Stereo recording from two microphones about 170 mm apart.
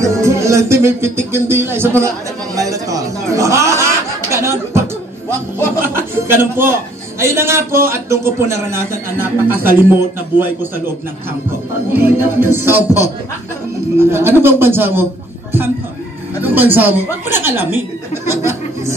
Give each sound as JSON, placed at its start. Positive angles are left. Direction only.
{"t": 0.0, "sound": "music", "side_deg": -15}
{"t": 5.6, "sound": "a man's voice", "side_deg": -15}
{"t": 11.9, "sound": "a man's voice", "side_deg": -10}
{"t": 13.9, "sound": "a man's voice", "side_deg": -15}
{"t": 16.4, "sound": "a man's voice", "side_deg": -10}